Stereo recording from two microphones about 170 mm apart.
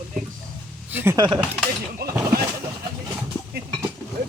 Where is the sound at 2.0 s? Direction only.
70° right (ahead or behind).